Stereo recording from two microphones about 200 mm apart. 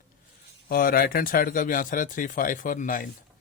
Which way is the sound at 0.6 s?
45° left (ahead or behind).